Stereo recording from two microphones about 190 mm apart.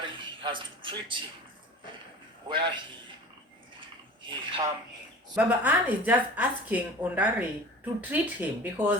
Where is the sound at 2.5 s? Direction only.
25° right (ahead or behind).